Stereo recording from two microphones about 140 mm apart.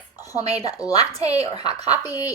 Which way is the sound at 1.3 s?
50° right (ahead or behind).